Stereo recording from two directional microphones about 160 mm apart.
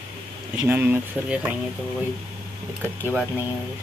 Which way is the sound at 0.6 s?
10° right (ahead or behind).